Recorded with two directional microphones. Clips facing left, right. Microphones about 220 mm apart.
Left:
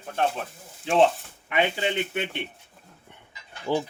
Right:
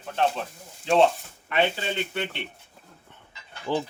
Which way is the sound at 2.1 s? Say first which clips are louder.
Left 1 dB; 15° left (ahead or behind).